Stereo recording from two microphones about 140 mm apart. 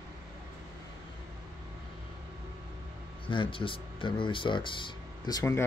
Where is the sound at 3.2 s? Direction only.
40° left (ahead or behind); by 5.6 s 25° left (ahead or behind).